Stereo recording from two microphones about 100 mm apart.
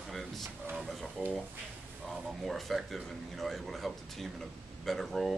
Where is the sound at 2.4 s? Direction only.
Centre (ahead or behind).